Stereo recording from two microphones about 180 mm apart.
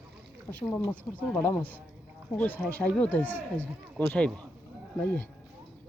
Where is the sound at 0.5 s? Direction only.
5° left (ahead or behind).